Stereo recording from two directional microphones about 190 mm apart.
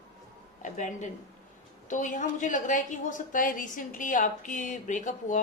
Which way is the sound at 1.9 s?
40° left (ahead or behind).